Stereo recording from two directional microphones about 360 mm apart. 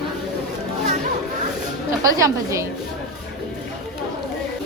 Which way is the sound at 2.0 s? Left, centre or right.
Centre.